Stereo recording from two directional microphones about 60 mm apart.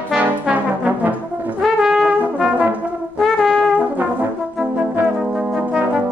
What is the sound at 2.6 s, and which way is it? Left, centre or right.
Brass instrument, right.